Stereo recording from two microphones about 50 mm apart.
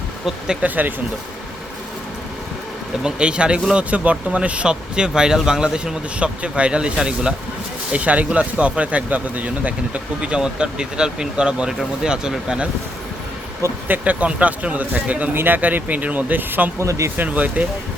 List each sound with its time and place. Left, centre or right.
0.6 s speech: right
3.0 s speech: centre
7.9 s speech: right
13.8 s speech: right
15.4 s speech: right
15.6 s speech: right
16.8 s speech: right
17.2 s speech: right